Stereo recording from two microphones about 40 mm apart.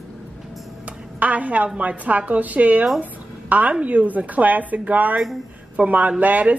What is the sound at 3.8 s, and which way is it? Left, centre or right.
A woman's voice, right.